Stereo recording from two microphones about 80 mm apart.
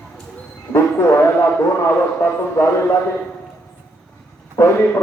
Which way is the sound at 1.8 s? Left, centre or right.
Left.